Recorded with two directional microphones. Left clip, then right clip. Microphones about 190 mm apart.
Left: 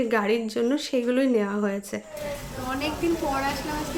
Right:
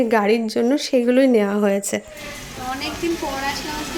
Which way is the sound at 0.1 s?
30° right (ahead or behind).